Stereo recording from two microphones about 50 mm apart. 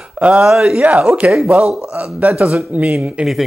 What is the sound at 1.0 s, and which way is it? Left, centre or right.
Speech, right.